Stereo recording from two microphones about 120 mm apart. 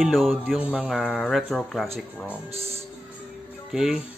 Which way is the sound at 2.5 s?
55° right (ahead or behind).